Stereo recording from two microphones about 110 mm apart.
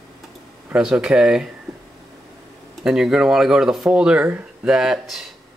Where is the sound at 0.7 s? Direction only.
5° right (ahead or behind).